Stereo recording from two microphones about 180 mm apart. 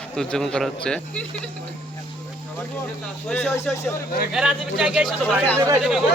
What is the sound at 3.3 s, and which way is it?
Speech, 10° left (ahead or behind).